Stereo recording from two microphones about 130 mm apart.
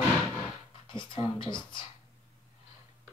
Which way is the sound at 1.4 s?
35° left (ahead or behind).